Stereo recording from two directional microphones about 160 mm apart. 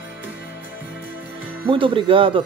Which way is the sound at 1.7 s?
30° right (ahead or behind).